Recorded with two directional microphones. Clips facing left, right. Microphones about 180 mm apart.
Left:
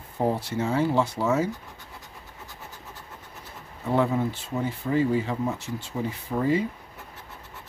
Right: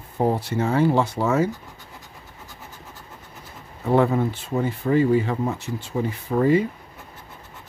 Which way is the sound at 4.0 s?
55° right (ahead or behind).